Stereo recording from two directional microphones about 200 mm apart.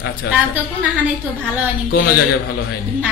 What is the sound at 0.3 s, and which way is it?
Speech, 55° left (ahead or behind).